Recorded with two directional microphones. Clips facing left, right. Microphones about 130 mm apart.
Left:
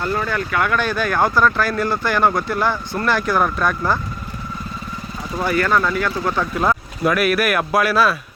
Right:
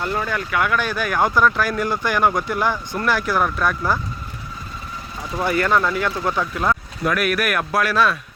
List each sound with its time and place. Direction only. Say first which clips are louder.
0.0 s speech: left 2 dB; 15° right (ahead or behind)
5.5 s speech: left 1 dB; 20° right (ahead or behind)
6.6 s speech: left 3 dB; 10° left (ahead or behind)